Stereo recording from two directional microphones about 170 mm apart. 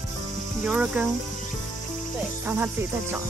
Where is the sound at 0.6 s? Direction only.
5° right (ahead or behind).